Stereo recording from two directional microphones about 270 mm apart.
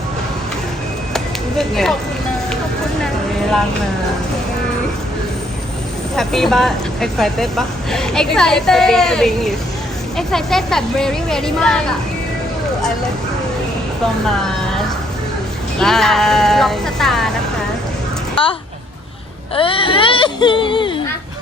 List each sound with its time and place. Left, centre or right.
1.1 s a sound: centre
6.1 s speech: centre
15.8 s speech: centre
19.5 s speech: centre